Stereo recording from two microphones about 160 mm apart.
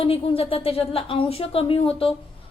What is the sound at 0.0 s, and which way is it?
A woman's voice, 35° left (ahead or behind).